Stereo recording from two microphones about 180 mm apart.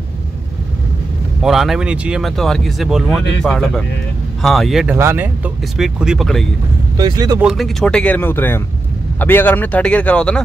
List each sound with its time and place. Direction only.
1.4 s speech: centre (ahead or behind)
4.9 s speech: 10° right (ahead or behind)
7.0 s speech: 20° right (ahead or behind)
7.3 s speech: centre (ahead or behind)